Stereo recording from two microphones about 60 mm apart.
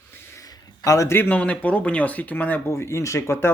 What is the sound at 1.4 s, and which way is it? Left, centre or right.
Speech, left.